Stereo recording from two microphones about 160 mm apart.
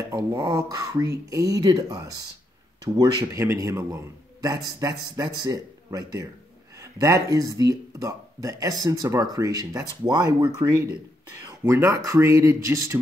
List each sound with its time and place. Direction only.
0.1 s speech: 20° right (ahead or behind)